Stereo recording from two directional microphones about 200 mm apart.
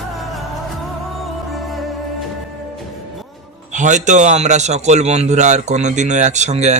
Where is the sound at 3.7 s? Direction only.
40° right (ahead or behind).